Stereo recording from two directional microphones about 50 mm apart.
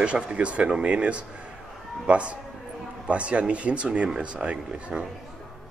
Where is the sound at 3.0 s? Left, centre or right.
Right.